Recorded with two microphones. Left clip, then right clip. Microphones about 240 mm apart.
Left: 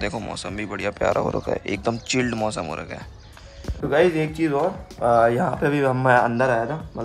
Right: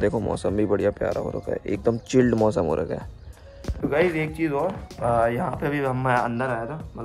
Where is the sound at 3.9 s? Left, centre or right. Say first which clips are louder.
Left 4 dB; left.